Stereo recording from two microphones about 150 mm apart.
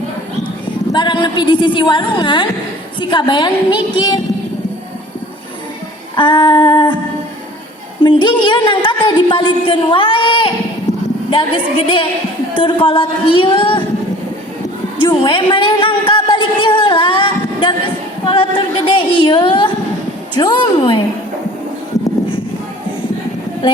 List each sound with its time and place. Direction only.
0.9 s a woman's voice: 30° left (ahead or behind)
6.1 s female singing: 30° left (ahead or behind)
8.0 s a woman's voice: 30° left (ahead or behind)
14.9 s a woman's voice: 35° left (ahead or behind)